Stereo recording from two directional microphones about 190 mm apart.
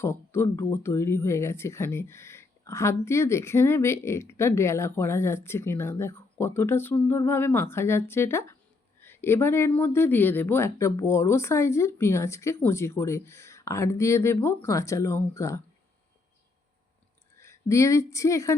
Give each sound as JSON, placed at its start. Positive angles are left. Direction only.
{"t": 0.0, "sound": "speech", "side_deg": 15}
{"t": 17.3, "sound": "speech", "side_deg": 15}